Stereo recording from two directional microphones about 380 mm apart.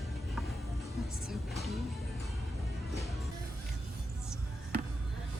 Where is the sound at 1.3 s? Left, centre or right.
Centre.